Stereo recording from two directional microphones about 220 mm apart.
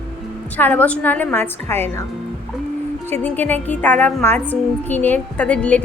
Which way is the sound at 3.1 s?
10° left (ahead or behind).